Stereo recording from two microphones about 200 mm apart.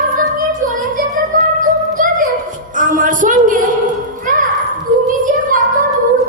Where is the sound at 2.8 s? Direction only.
40° right (ahead or behind).